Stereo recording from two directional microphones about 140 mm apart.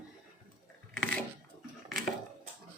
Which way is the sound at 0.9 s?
10° left (ahead or behind).